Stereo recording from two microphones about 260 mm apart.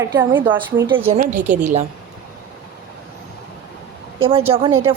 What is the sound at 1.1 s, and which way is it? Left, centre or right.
Speech, right.